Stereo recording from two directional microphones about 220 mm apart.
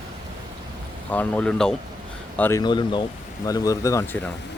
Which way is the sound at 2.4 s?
15° left (ahead or behind).